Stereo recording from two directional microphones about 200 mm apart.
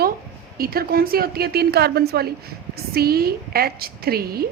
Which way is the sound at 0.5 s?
50° right (ahead or behind).